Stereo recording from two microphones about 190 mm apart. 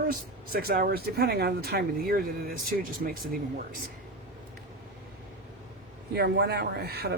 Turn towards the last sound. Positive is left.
turn(degrees=-55)  # may be behind; listen again after turning